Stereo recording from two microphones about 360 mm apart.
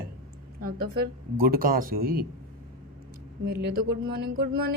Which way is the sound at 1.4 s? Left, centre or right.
Right.